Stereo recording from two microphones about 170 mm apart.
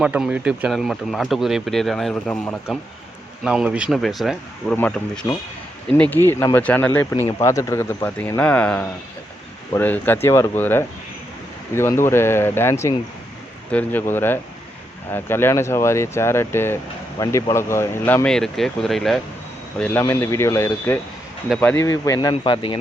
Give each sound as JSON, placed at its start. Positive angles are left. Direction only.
{"t": 0.0, "sound": "speech", "side_deg": -5}
{"t": 3.4, "sound": "speech", "side_deg": -5}